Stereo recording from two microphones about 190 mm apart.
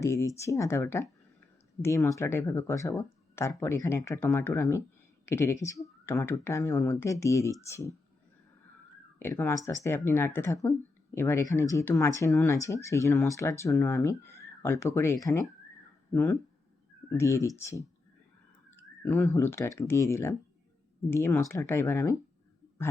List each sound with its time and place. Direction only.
0.0 s speech: 15° left (ahead or behind)
9.1 s speech: 10° left (ahead or behind)